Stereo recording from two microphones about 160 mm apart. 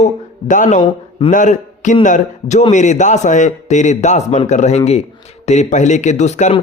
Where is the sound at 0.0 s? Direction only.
50° left (ahead or behind).